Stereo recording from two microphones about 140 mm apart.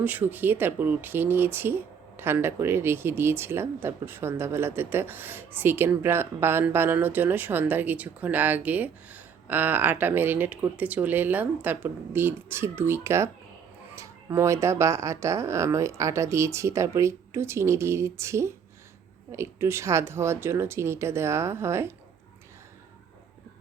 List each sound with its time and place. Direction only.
0.0 s speech: 15° right (ahead or behind)